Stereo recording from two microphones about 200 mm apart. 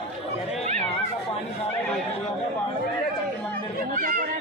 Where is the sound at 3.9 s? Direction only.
45° right (ahead or behind).